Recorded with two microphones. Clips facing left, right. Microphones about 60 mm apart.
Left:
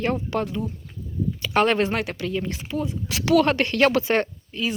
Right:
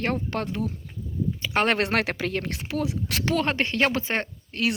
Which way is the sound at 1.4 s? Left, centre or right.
Right.